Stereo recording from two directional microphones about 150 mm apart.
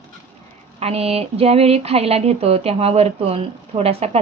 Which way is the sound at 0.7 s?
40° right (ahead or behind).